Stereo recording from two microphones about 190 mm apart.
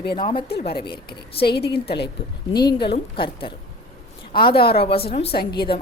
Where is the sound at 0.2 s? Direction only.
25° left (ahead or behind).